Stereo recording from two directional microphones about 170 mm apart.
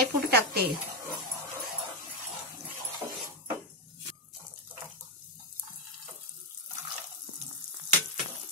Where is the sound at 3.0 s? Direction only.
15° right (ahead or behind).